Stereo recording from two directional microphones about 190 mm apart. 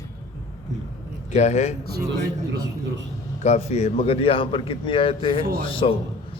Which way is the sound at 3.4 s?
35° left (ahead or behind).